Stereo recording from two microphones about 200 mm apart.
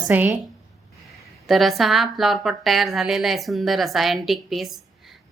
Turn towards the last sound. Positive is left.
turn(degrees=0)  # may be behind; listen again after turning